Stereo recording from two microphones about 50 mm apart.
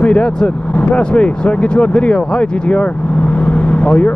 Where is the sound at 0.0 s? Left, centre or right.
Left.